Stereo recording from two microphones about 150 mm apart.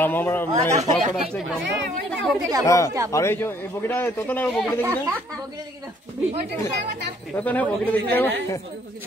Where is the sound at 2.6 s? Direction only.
20° left (ahead or behind).